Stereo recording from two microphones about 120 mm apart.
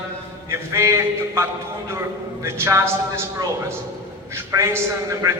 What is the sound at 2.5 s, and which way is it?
Speech, 20° right (ahead or behind).